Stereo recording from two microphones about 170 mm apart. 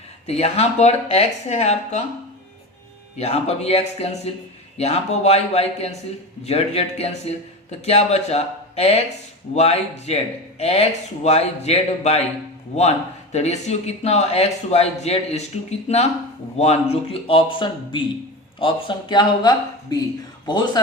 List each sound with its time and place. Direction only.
0.3 s a man's voice: 40° left (ahead or behind)
3.2 s a man's voice: 40° left (ahead or behind)
13.3 s a man's voice: 40° left (ahead or behind)